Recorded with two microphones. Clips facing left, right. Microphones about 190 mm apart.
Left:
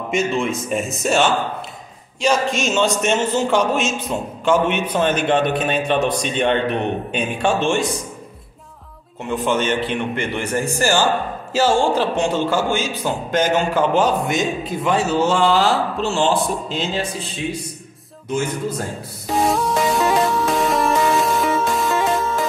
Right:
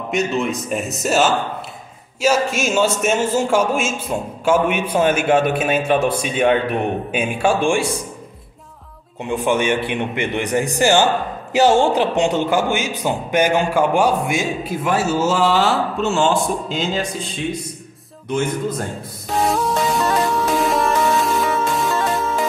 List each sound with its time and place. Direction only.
0.1 s speech: centre (ahead or behind)
9.3 s speech: 15° right (ahead or behind)
18.3 s speech: 10° left (ahead or behind)
19.2 s music: centre (ahead or behind)